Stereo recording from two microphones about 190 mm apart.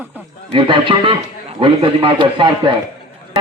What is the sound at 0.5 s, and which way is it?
A man's voice, 25° right (ahead or behind).